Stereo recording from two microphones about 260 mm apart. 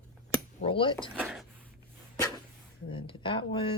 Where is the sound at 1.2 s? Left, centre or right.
Centre.